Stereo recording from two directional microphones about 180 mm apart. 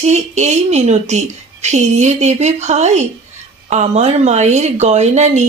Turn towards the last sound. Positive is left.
turn(degrees=-40)  # may be behind; listen again after turning